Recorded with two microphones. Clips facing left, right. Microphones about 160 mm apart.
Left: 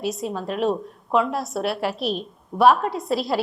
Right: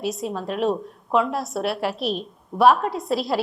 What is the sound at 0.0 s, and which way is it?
A woman's voice, centre (ahead or behind).